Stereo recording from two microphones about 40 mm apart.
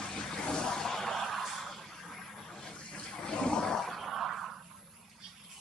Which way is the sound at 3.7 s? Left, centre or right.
Centre.